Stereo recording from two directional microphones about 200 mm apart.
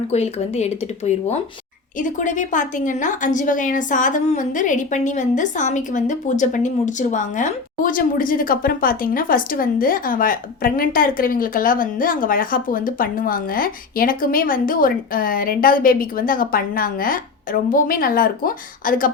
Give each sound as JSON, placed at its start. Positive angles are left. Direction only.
{"t": 0.1, "sound": "a woman's voice", "side_deg": 30}